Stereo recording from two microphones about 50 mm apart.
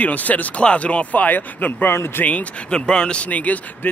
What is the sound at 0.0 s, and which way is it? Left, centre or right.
A man's voice, left.